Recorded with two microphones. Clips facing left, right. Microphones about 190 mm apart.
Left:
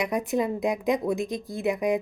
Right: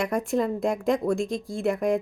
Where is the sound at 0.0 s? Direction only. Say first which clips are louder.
Right 1 dB; centre (ahead or behind).